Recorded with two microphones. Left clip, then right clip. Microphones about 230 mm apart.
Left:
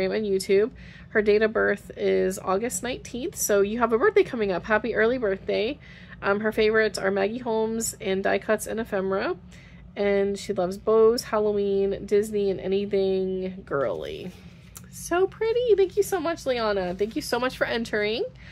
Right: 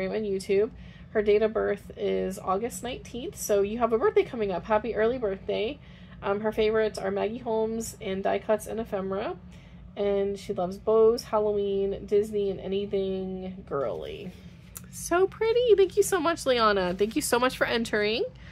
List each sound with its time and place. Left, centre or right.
0.0 s speech: left
15.0 s speech: centre